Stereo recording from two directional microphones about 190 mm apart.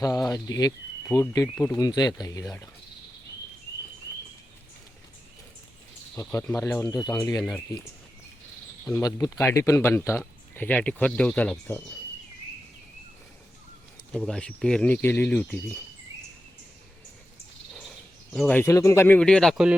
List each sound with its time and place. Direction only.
0.0 s speech: 20° left (ahead or behind)
6.1 s speech: 15° left (ahead or behind)
8.8 s speech: 15° left (ahead or behind)
14.1 s speech: 5° left (ahead or behind)
18.3 s speech: 10° left (ahead or behind)